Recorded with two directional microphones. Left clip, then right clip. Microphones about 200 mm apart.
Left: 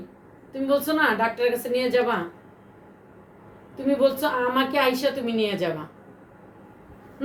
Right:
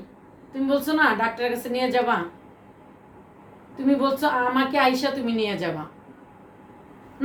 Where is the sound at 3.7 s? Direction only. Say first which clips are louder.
Left 1 dB; 15° right (ahead or behind).